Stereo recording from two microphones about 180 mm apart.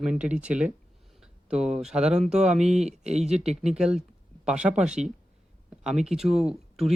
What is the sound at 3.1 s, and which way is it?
Speech, 40° right (ahead or behind).